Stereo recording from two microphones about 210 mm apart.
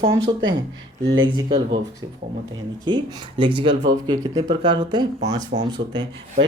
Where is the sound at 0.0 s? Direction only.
20° right (ahead or behind).